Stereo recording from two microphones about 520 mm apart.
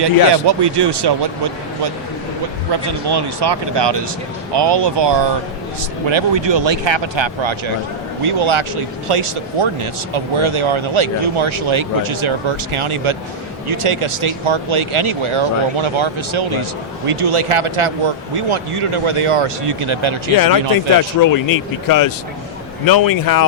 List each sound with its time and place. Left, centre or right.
0.0 s speech: right
2.8 s speech: right
21.2 s speech: left